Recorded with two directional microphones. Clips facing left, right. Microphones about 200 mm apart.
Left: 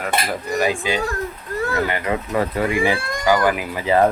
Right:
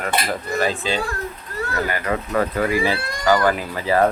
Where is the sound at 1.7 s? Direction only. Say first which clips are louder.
Even; 25° left (ahead or behind).